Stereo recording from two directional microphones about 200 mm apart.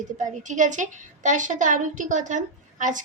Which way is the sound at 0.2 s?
40° right (ahead or behind).